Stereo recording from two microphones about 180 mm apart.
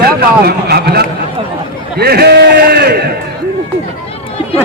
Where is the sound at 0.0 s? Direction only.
60° right (ahead or behind).